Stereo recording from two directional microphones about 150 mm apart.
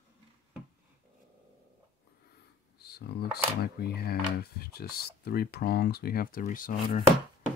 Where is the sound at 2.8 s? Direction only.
90° left.